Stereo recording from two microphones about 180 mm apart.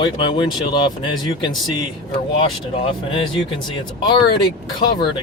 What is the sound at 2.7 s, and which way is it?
Speech, 30° left (ahead or behind).